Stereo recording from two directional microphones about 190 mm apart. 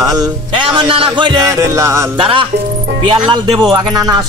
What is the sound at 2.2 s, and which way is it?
Speech, 25° right (ahead or behind).